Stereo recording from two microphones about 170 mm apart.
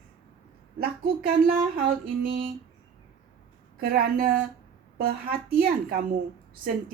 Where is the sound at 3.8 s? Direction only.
60° right (ahead or behind).